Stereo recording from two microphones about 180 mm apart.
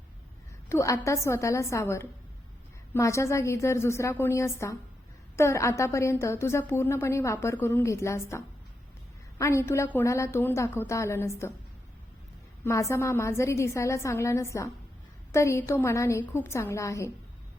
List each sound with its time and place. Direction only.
0.7 s a woman's voice: 15° left (ahead or behind)
12.6 s a woman's voice: 15° left (ahead or behind)